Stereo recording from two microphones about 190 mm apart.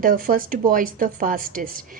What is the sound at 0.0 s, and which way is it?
A woman's voice, 50° right (ahead or behind).